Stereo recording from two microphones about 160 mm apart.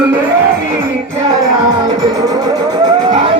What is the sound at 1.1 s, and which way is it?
Music, 25° right (ahead or behind).